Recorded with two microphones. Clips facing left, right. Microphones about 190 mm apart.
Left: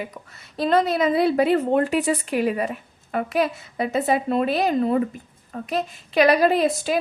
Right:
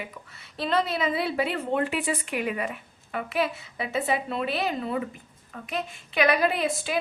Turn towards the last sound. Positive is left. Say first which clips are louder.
# left 7 dB
turn(degrees=40)  # may be behind; listen again after turning